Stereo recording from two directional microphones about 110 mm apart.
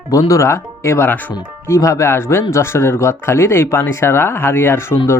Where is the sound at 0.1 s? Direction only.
30° left (ahead or behind).